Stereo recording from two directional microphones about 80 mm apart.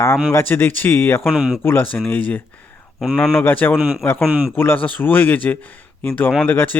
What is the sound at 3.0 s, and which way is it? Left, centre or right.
Speech, centre.